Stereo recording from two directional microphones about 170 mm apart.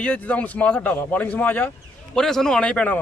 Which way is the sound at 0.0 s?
10° left (ahead or behind).